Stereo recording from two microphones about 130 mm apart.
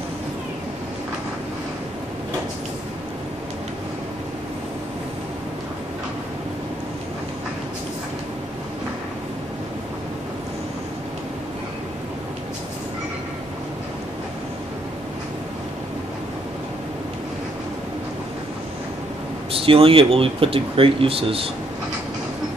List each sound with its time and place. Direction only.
19.5 s speech: 45° right (ahead or behind)